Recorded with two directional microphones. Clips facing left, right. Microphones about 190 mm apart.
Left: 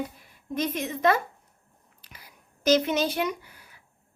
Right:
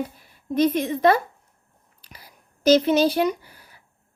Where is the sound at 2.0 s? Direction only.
35° right (ahead or behind).